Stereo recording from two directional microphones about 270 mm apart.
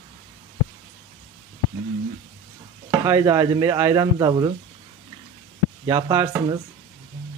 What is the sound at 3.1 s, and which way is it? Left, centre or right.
Speech, centre.